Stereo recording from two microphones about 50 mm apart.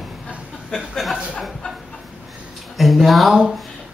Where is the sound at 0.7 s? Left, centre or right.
Centre.